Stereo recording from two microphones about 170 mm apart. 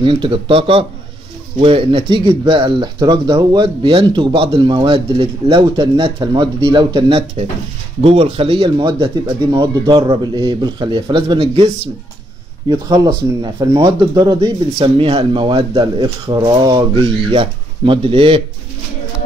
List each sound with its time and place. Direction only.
0.0 s speech: 30° right (ahead or behind)
12.6 s speech: 20° right (ahead or behind)
14.8 s speech: 35° right (ahead or behind)